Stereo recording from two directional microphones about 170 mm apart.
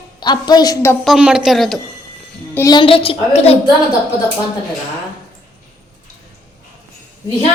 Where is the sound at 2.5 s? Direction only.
20° left (ahead or behind).